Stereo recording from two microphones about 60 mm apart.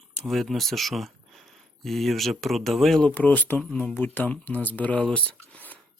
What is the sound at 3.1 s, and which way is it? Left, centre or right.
Speech, left.